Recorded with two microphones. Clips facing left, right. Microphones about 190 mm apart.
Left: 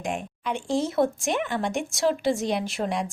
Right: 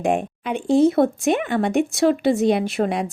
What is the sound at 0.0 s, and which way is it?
Speech, 60° right (ahead or behind).